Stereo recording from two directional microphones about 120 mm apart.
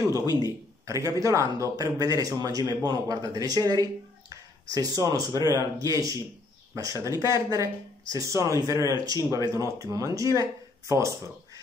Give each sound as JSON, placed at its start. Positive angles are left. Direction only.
{"t": 0.8, "sound": "speech", "side_deg": -25}